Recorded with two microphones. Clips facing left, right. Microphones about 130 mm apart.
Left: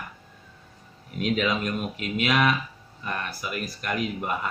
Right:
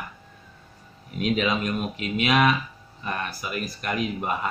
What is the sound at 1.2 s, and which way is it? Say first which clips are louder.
Speech: right 1 dB; 20° right (ahead or behind).